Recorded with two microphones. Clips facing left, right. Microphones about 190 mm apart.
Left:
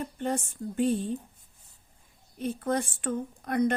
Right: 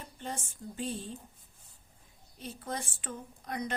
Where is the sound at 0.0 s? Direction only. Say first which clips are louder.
Left 10 dB; 60° left (ahead or behind).